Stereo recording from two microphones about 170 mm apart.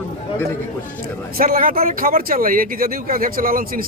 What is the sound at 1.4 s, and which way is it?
Speech, 55° right (ahead or behind).